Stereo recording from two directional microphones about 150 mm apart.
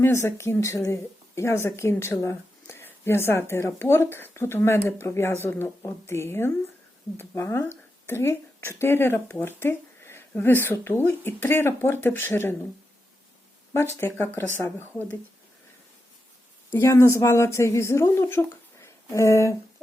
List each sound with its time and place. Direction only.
0.0 s a woman's voice: 15° left (ahead or behind)
13.7 s a woman's voice: 15° left (ahead or behind)
16.7 s speech: 15° left (ahead or behind)